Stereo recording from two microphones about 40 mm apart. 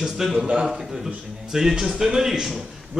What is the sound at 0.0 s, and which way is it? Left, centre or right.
A man's voice, centre.